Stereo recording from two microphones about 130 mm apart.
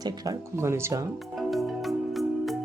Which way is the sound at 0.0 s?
25° right (ahead or behind).